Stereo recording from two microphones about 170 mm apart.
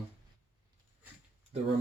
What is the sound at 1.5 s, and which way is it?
Speech, 40° right (ahead or behind).